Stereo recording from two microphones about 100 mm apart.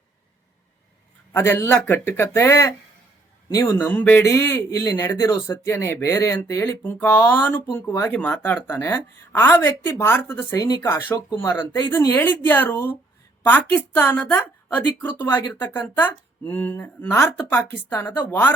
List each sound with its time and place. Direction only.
1.3 s speech: 25° left (ahead or behind)
3.8 s speech: 20° left (ahead or behind)
6.8 s speech: 20° left (ahead or behind)
7.7 s speech: 30° left (ahead or behind)
8.1 s a woman's voice: 15° left (ahead or behind)
10.5 s a woman's voice: 40° left (ahead or behind); by 18.5 s 20° left (ahead or behind)